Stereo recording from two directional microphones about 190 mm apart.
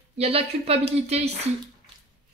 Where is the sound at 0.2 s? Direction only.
30° right (ahead or behind).